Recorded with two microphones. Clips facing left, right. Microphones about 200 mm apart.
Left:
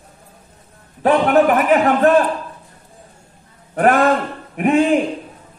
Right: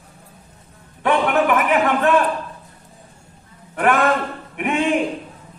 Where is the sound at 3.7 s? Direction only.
35° left (ahead or behind).